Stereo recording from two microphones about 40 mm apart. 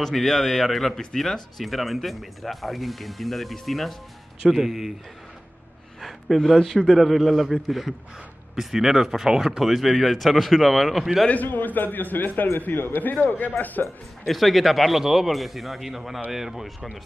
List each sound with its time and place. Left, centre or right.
0.0 s speech: centre
5.9 s a sound: centre
6.5 s speech: centre
11.4 s a man's voice: left
14.2 s speech: centre